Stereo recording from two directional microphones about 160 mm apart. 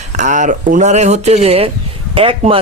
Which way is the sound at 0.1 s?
50° right (ahead or behind).